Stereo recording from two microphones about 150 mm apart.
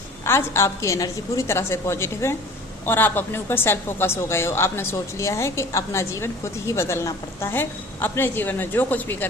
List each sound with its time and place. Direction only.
0.3 s a woman's voice: 15° left (ahead or behind)